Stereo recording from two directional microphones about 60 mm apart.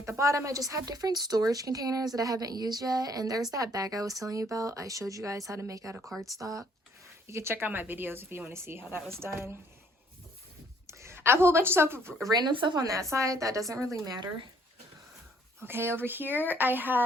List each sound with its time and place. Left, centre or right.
0.0 s a woman's voice: right
6.0 s speech: centre
6.4 s speech: right
7.3 s a woman's voice: right
10.8 s speech: right
12.8 s a woman's voice: right
15.6 s a woman's voice: right